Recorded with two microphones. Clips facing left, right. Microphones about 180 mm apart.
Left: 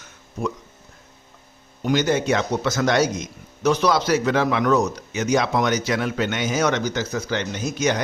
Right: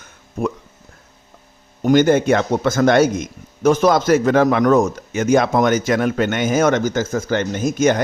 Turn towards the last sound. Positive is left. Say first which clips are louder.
# right 6 dB
turn(degrees=-50)  # may be behind; listen again after turning